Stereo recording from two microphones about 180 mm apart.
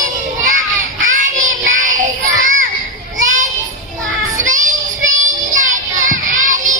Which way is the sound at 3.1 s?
45° right (ahead or behind).